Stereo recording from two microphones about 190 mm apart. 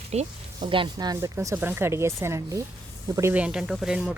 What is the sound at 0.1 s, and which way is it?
Speech, 35° right (ahead or behind).